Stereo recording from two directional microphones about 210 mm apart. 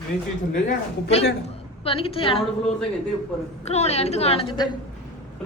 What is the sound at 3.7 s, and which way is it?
A woman's voice, 30° left (ahead or behind).